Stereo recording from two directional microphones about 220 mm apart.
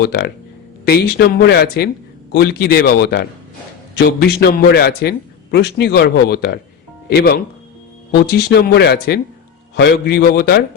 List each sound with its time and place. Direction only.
0.0 s a man's voice: 50° left (ahead or behind)
8.4 s a man's voice: 45° left (ahead or behind)